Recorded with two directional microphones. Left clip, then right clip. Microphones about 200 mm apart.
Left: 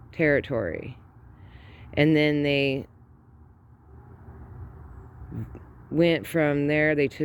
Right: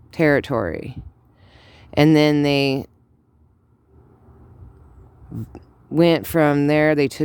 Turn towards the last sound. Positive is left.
turn(degrees=-35)  # may be behind; listen again after turning